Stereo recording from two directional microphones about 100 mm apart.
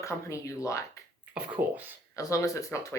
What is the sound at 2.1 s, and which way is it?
Speech, 30° left (ahead or behind).